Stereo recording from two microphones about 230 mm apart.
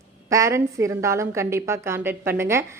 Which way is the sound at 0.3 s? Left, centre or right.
Centre.